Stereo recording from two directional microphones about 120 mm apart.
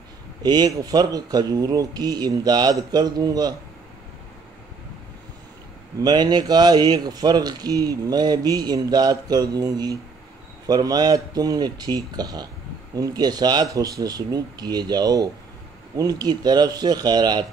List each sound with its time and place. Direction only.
0.4 s a man's voice: 35° right (ahead or behind)
5.9 s a man's voice: 35° right (ahead or behind)